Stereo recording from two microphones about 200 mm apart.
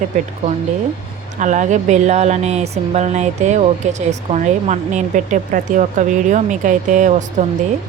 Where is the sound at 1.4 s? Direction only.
35° right (ahead or behind).